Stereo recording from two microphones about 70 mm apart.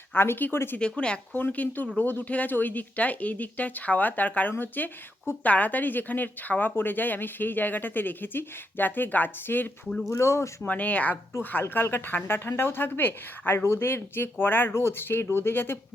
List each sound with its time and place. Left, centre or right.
0.1 s a woman's voice: left
0.8 s a woman's voice: centre
10.1 s speech: left
10.6 s a woman's voice: left